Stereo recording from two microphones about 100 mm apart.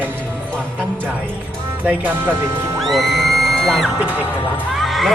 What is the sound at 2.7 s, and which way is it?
Music, centre (ahead or behind).